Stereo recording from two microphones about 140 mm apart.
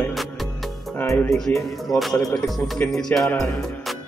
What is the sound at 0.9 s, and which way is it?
Speech, 15° left (ahead or behind).